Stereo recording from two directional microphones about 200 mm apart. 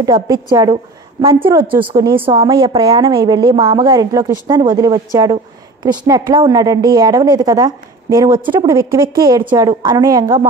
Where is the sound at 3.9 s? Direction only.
15° right (ahead or behind).